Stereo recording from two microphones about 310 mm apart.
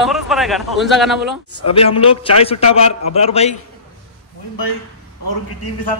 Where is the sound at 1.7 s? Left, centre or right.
Centre.